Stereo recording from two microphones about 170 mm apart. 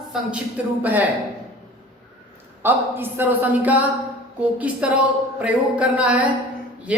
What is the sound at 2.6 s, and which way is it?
Speech, 10° right (ahead or behind).